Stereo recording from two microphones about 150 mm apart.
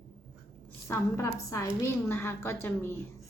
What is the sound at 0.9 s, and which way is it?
A woman's voice, 20° left (ahead or behind).